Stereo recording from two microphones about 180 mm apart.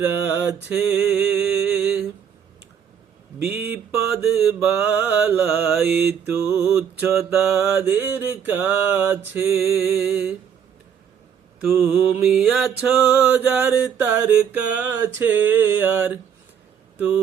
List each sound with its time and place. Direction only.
0.0 s mantra: 10° right (ahead or behind)
3.6 s a sound: 60° right (ahead or behind)
4.2 s mantra: 5° right (ahead or behind)
11.7 s mantra: 15° right (ahead or behind)
12.2 s mantra: 5° right (ahead or behind)